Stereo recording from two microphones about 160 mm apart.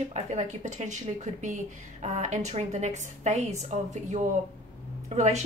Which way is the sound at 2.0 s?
45° right (ahead or behind).